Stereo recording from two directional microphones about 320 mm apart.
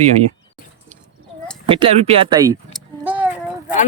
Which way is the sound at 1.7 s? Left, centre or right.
Centre.